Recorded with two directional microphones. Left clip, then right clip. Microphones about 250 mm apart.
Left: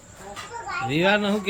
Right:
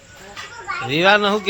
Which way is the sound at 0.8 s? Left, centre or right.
Centre.